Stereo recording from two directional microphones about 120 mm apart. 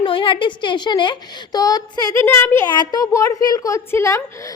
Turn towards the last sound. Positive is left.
turn(degrees=25)  # may be behind; listen again after turning